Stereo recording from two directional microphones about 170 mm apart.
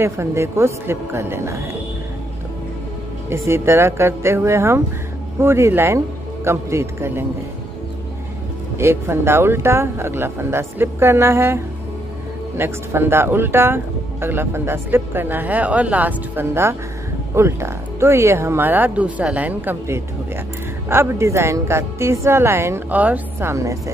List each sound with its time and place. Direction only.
0.0 s speech: 15° right (ahead or behind)
3.3 s speech: 15° right (ahead or behind)
8.7 s speech: 15° right (ahead or behind)